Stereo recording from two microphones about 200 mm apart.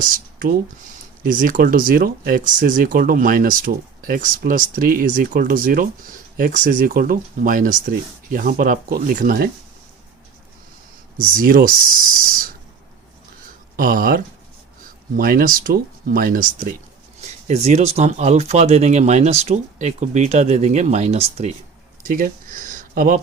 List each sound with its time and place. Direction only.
0.0 s speech: 45° right (ahead or behind)
11.2 s speech: 45° right (ahead or behind)
13.7 s speech: 45° right (ahead or behind)
22.0 s a sound: 45° right (ahead or behind)